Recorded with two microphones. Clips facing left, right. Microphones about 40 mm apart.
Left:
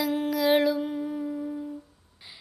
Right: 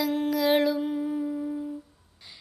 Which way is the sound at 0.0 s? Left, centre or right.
Centre.